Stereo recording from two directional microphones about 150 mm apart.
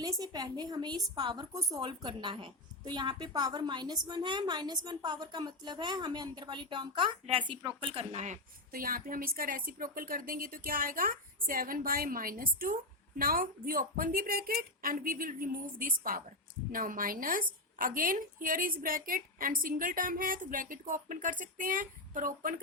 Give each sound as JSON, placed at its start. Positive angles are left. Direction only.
{"t": 0.0, "sound": "a woman's voice", "side_deg": -25}
{"t": 8.7, "sound": "a woman's voice", "side_deg": -75}